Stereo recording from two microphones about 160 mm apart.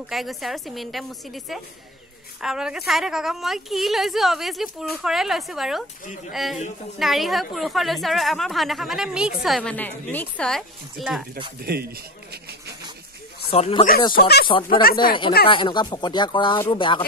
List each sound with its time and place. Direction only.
0.1 s a woman's voice: centre (ahead or behind)
11.6 s speech: 75° right (ahead or behind)
13.5 s speech: 35° left (ahead or behind)
14.1 s speech: 80° left
14.7 s speech: 65° left (ahead or behind)
15.4 s speech: 30° left (ahead or behind)